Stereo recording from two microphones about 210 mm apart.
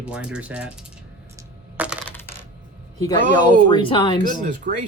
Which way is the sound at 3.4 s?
20° left (ahead or behind).